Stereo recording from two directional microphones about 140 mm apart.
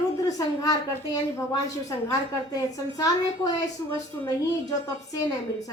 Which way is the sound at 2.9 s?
25° left (ahead or behind).